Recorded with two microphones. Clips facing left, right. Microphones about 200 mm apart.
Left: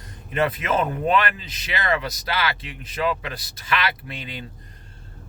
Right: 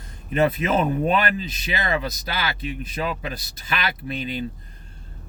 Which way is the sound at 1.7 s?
20° right (ahead or behind).